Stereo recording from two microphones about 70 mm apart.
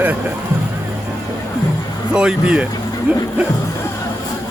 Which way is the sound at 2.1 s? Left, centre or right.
Centre.